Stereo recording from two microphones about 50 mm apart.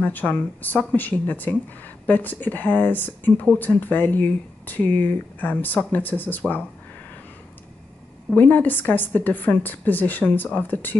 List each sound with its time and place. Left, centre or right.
0.0 s speech: left
8.4 s speech: left